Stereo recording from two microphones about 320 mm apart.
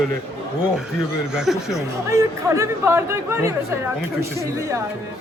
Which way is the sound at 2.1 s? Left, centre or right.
Centre.